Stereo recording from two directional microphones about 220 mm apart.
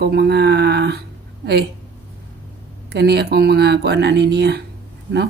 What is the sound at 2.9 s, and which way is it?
Speech, 50° right (ahead or behind).